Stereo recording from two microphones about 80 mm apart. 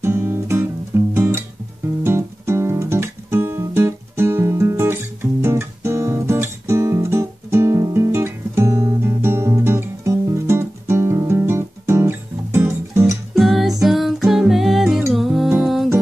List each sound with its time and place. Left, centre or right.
0.0 s music: right
2.0 s guitar: right
9.0 s music: right
13.3 s music: centre